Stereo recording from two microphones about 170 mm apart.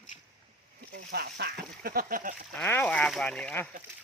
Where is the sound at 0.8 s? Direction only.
65° right (ahead or behind).